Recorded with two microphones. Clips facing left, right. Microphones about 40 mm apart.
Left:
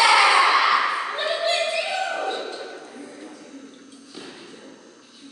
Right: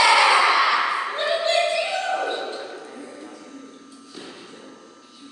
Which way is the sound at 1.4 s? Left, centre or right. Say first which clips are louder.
Right 2 dB; centre.